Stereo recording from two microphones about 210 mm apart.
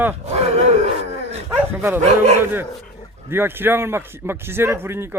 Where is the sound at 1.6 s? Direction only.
10° right (ahead or behind).